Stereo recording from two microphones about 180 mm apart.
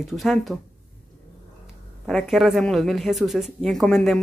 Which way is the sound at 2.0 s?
Centre (ahead or behind).